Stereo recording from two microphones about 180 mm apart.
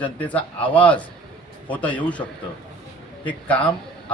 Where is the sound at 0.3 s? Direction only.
10° left (ahead or behind).